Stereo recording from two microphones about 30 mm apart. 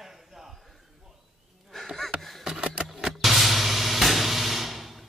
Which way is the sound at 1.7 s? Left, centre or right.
Centre.